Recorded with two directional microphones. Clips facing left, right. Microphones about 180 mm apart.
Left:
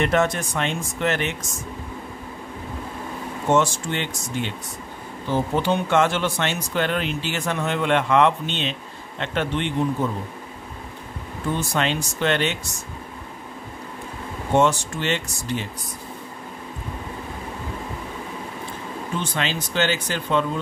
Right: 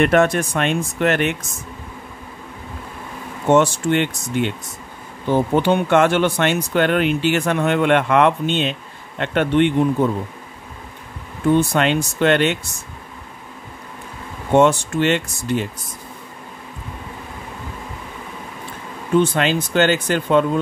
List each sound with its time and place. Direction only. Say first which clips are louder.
0.0 s speech: right 5 dB; 60° right (ahead or behind)
3.4 s speech: right 5 dB; 60° right (ahead or behind)
11.5 s speech: right 7 dB; 60° right (ahead or behind)
14.5 s speech: right 5 dB; 55° right (ahead or behind)
19.1 s speech: right 11 dB; 50° right (ahead or behind)